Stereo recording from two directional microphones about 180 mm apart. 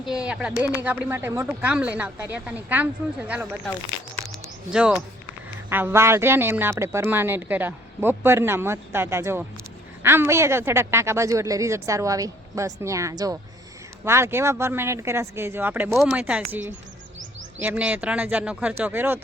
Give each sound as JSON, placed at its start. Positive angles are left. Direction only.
{"t": 0.0, "sound": "speech", "side_deg": -5}
{"t": 4.7, "sound": "speech", "side_deg": -5}
{"t": 17.6, "sound": "speech", "side_deg": -10}